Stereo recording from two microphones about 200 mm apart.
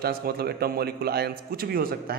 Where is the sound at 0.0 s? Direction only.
50° right (ahead or behind).